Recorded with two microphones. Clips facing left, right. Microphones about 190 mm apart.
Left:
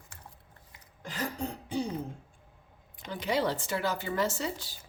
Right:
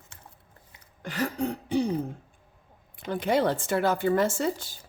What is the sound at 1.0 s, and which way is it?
Cough, 65° right (ahead or behind).